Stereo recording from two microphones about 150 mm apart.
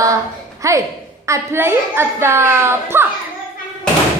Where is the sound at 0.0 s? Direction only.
20° right (ahead or behind).